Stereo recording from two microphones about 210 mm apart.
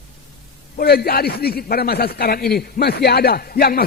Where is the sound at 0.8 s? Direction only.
45° left (ahead or behind).